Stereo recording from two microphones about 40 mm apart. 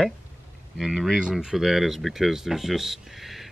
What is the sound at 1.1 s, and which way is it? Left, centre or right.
Speech, centre.